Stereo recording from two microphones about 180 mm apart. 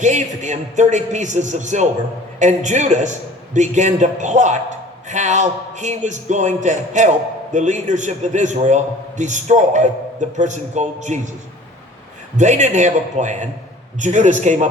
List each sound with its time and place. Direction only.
0.0 s a man's voice: 40° right (ahead or behind)
12.4 s a man's voice: 40° right (ahead or behind)